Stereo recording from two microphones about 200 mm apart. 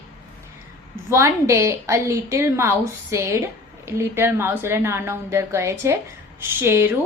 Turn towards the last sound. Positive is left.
turn(degrees=-10)  # may be behind; listen again after turning